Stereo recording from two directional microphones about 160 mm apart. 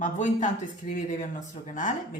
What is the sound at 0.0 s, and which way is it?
Speech, 50° left (ahead or behind).